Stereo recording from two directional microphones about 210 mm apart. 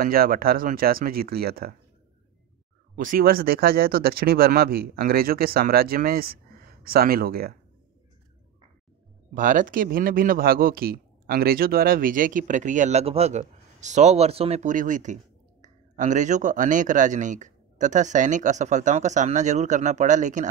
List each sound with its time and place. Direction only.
0.0 s speech: 45° right (ahead or behind)
3.0 s speech: 40° right (ahead or behind)
9.3 s speech: 40° right (ahead or behind)